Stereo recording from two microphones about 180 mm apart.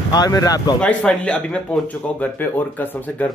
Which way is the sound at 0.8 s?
5° left (ahead or behind).